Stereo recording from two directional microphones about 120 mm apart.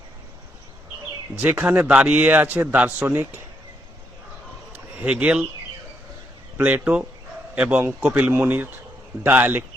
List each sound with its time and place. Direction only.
1.4 s a man's voice: 15° right (ahead or behind)
4.9 s a man's voice: 10° right (ahead or behind)
6.6 s a man's voice: 15° right (ahead or behind)